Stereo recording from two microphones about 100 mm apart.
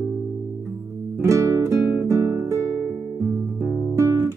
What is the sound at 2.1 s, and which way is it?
Guitar, 25° right (ahead or behind).